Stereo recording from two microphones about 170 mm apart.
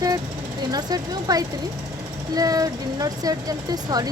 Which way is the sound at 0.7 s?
25° right (ahead or behind).